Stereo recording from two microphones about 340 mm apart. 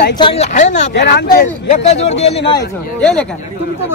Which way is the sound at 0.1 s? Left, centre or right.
Centre.